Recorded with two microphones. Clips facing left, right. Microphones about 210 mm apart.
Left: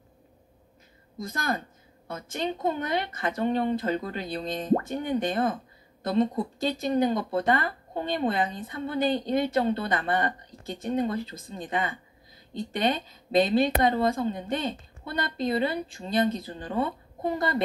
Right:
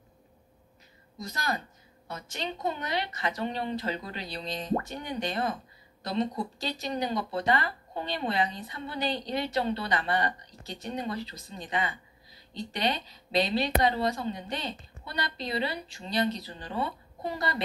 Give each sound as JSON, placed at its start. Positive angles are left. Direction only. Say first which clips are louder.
{"t": 1.1, "sound": "speech", "louder": "left 3 dB", "side_deg": 50}